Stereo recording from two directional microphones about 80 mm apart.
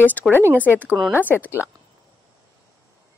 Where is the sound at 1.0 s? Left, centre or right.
Right.